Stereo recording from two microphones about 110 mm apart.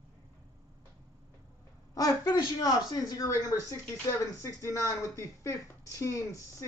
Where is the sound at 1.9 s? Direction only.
35° left (ahead or behind).